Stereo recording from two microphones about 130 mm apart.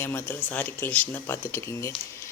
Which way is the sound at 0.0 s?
15° left (ahead or behind).